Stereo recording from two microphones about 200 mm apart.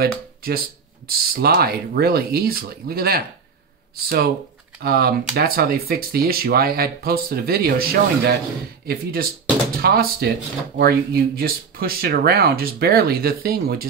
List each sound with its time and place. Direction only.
0.0 s speech: 50° right (ahead or behind)